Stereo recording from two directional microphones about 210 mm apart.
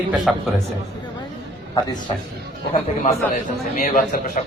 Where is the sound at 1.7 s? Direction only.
20° left (ahead or behind).